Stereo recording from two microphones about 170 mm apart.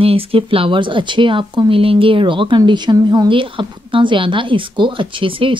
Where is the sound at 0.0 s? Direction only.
35° right (ahead or behind).